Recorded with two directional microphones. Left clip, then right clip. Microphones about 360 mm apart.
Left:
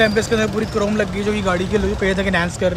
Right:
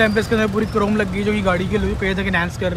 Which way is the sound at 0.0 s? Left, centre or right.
Centre.